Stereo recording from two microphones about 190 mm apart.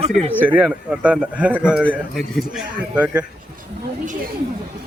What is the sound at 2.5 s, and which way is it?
Speech, 5° right (ahead or behind).